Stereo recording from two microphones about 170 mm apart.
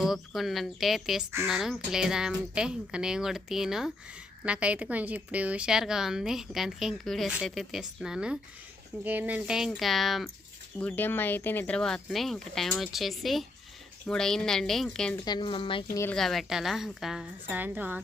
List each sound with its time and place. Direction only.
0.0 s a woman's voice: centre (ahead or behind)
15.1 s a woman's voice: 25° left (ahead or behind)
15.9 s speech: 15° left (ahead or behind)
16.1 s a woman's voice: centre (ahead or behind)